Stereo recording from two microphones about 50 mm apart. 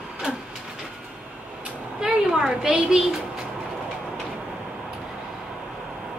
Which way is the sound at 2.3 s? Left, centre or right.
Centre.